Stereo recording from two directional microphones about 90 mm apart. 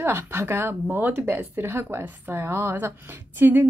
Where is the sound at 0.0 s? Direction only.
30° right (ahead or behind).